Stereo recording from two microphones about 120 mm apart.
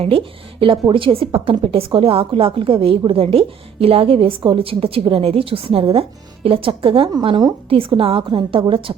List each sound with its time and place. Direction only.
0.6 s a woman's voice: 45° right (ahead or behind)